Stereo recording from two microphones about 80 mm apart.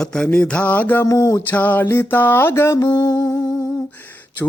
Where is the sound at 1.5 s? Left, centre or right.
Left.